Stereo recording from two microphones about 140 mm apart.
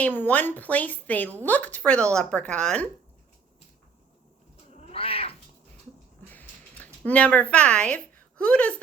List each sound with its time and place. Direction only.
0.0 s a woman's voice: 10° left (ahead or behind)
4.7 s cat: 45° left (ahead or behind)
6.3 s a sound: 10° left (ahead or behind)